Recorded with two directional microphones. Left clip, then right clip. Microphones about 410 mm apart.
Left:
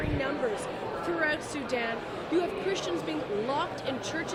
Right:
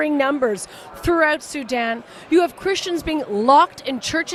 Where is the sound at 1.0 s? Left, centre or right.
Right.